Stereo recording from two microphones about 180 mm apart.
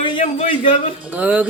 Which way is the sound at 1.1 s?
10° right (ahead or behind).